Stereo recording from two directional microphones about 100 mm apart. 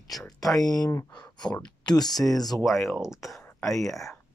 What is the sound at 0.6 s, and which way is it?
Speech, 40° left (ahead or behind).